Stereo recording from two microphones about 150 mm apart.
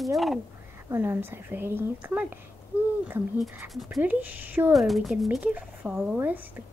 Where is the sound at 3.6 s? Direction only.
Centre (ahead or behind).